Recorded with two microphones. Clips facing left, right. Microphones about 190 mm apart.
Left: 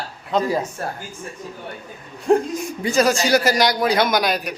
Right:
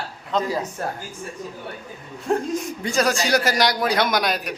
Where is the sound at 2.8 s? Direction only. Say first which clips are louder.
Left 5 dB; centre (ahead or behind).